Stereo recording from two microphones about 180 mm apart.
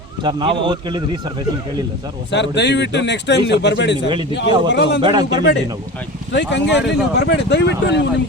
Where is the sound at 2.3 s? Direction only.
75° left (ahead or behind).